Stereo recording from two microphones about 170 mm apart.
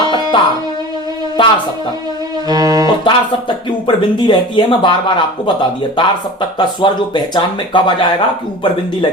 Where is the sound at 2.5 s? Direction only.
20° right (ahead or behind).